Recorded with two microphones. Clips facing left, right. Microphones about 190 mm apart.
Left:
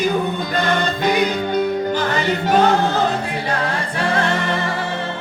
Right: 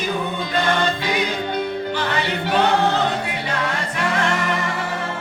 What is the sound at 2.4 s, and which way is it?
Choir, 40° left (ahead or behind).